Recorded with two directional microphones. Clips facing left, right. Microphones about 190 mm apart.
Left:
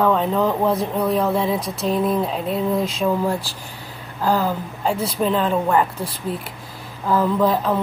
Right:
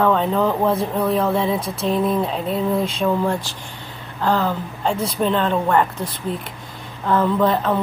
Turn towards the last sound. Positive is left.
turn(degrees=0)  # may be behind; listen again after turning